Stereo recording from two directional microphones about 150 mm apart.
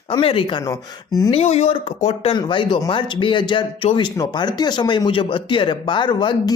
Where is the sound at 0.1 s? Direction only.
35° left (ahead or behind).